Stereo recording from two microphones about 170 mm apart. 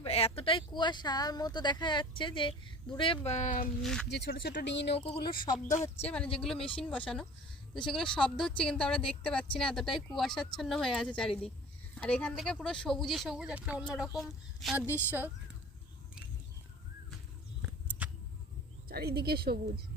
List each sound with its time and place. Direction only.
0.0 s speech: 35° left (ahead or behind)
4.1 s speech: 75° left (ahead or behind)
5.6 s speech: 45° left (ahead or behind)
6.4 s a woman's voice: 5° left (ahead or behind)
14.8 s a woman's voice: 10° right (ahead or behind)
17.6 s a sound: 10° right (ahead or behind)
18.9 s speech: 65° right (ahead or behind)